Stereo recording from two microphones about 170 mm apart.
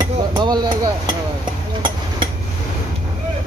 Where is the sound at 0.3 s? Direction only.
25° right (ahead or behind).